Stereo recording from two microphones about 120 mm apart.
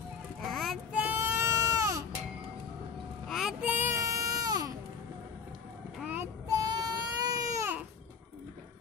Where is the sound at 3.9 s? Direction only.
25° right (ahead or behind).